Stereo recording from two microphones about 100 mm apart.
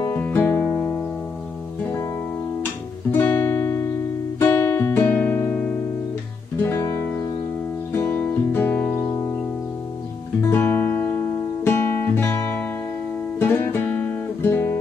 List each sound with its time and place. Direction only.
0.1 s music: 20° left (ahead or behind)
3.1 s guitar: 20° left (ahead or behind)
4.4 s music: 20° left (ahead or behind)
6.6 s guitar: 25° left (ahead or behind)
7.9 s music: 20° left (ahead or behind)
10.4 s music: 25° left (ahead or behind)